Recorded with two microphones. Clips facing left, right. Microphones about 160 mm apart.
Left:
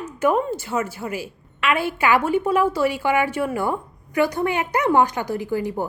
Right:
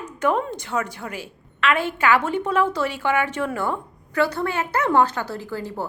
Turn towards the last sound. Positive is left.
turn(degrees=15)  # may be behind; listen again after turning